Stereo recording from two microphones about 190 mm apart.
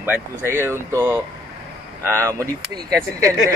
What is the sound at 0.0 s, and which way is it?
Speech, 10° right (ahead or behind).